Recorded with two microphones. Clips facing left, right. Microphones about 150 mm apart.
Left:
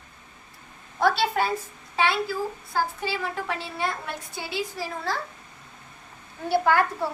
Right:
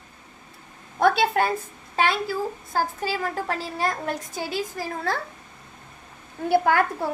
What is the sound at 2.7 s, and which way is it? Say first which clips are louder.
A woman's voice: right 2 dB; 45° right (ahead or behind).